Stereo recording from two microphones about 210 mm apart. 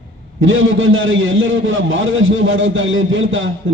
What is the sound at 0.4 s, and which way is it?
A man's voice, 65° right (ahead or behind).